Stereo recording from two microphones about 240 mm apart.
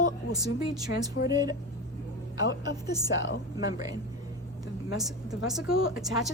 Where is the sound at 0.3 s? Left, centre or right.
Centre.